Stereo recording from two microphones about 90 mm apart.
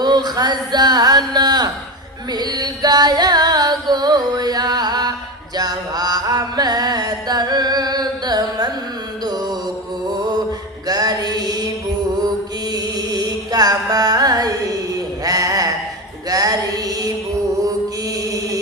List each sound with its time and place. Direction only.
0.0 s a sound: 50° right (ahead or behind)
2.3 s music: 50° right (ahead or behind)
10.8 s mantra: 45° right (ahead or behind)
12.7 s music: 45° right (ahead or behind)